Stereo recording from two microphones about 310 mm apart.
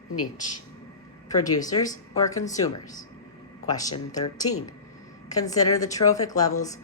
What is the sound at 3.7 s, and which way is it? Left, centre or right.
Speech, centre.